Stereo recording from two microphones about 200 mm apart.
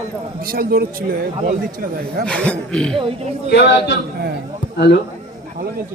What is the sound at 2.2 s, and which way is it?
Speech, 5° left (ahead or behind).